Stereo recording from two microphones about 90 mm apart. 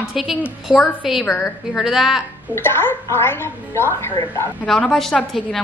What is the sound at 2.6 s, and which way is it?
A woman's voice, 25° left (ahead or behind).